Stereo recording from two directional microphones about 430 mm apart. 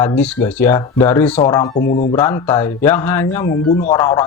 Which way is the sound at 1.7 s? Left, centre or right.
Left.